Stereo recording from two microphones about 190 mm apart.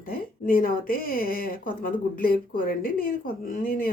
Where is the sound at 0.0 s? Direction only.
50° left (ahead or behind).